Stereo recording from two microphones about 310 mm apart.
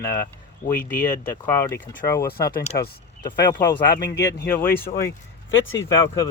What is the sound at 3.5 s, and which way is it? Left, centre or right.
Speech, centre.